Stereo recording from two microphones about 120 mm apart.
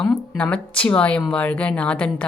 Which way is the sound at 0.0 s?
10° left (ahead or behind).